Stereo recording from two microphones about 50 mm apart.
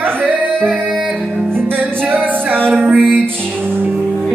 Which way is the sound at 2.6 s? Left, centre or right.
Right.